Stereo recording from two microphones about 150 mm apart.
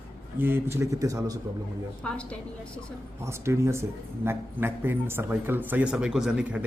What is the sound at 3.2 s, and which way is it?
Speech, 15° right (ahead or behind).